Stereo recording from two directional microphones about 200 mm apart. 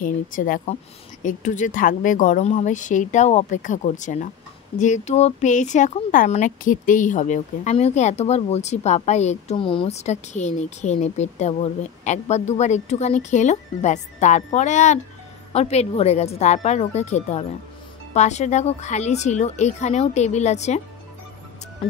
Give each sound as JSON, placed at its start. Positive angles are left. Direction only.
{"t": 0.0, "sound": "speech", "side_deg": 40}